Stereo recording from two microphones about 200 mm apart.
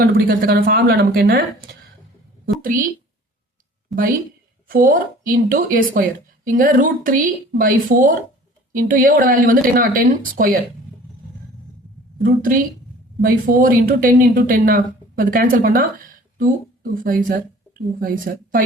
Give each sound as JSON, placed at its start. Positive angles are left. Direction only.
{"t": 0.0, "sound": "a woman's voice", "side_deg": -45}
{"t": 3.9, "sound": "a woman's voice", "side_deg": 0}
{"t": 4.7, "sound": "a woman's voice", "side_deg": -45}
{"t": 12.2, "sound": "a woman's voice", "side_deg": -45}